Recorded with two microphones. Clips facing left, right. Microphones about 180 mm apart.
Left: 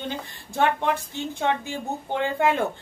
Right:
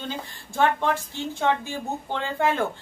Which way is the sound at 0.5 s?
20° left (ahead or behind).